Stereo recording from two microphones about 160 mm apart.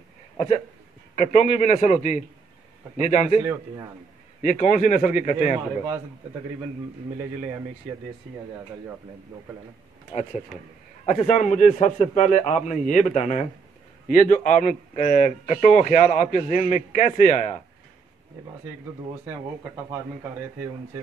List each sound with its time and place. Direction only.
1.1 s a man's voice: 50° left (ahead or behind)
4.4 s a man's voice: 50° left (ahead or behind)
5.4 s speech: 15° right (ahead or behind)
11.1 s a man's voice: 55° left (ahead or behind)